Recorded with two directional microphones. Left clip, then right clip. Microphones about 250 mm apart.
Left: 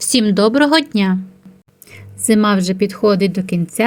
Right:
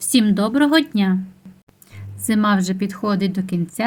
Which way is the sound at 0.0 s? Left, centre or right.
Left.